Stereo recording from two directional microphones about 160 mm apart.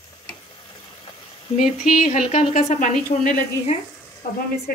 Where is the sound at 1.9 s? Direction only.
55° left (ahead or behind).